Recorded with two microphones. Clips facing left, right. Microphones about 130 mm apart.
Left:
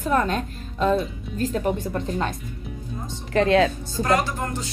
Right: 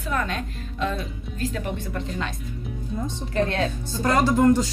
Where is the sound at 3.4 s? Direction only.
90° left.